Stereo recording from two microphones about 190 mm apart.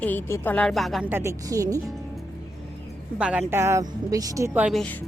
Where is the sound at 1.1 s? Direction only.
15° right (ahead or behind).